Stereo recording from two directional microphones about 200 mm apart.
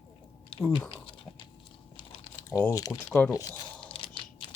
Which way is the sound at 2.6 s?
15° left (ahead or behind).